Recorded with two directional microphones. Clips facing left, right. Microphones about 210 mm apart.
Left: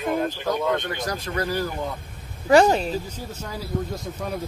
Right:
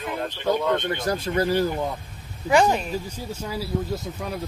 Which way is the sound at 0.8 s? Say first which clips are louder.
Right 3 dB; 25° right (ahead or behind).